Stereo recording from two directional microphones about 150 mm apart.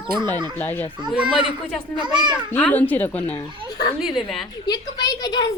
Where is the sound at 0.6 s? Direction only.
15° left (ahead or behind).